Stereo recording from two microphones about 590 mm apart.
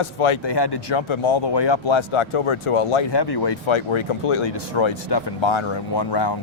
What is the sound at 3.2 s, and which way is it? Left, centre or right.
Speech, left.